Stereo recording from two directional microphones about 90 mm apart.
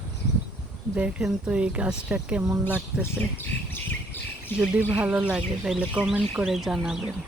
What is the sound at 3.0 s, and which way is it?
Bird, 25° left (ahead or behind).